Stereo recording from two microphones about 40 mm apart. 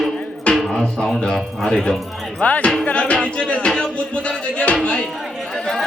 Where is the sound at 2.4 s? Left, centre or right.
Left.